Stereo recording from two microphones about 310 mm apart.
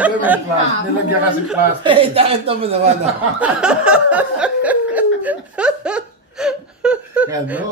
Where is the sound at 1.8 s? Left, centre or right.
Centre.